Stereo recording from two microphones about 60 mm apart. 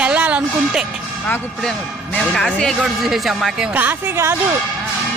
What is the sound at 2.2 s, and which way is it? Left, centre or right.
Speech, centre.